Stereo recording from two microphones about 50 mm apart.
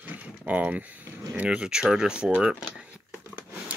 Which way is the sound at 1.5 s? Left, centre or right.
Centre.